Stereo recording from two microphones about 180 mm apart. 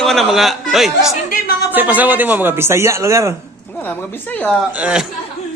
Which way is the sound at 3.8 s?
10° left (ahead or behind).